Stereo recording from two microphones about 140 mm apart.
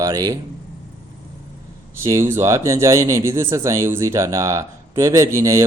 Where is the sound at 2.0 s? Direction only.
20° right (ahead or behind).